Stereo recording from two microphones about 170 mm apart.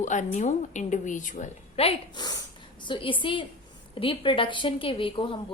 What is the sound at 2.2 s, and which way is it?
A woman's voice, 25° left (ahead or behind).